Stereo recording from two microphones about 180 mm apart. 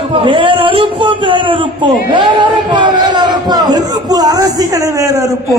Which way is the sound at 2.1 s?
25° right (ahead or behind).